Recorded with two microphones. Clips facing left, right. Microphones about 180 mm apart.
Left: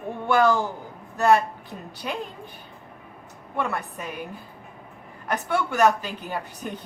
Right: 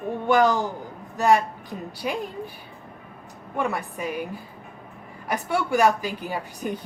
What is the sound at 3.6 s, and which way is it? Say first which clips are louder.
Speech: right 2 dB; 10° right (ahead or behind).